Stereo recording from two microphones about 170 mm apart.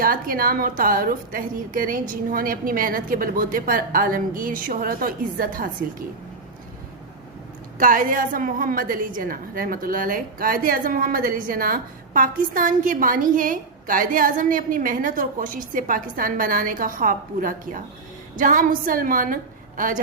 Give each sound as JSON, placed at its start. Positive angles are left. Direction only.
{"t": 0.0, "sound": "a woman's voice", "side_deg": -55}
{"t": 7.8, "sound": "a woman's voice", "side_deg": -55}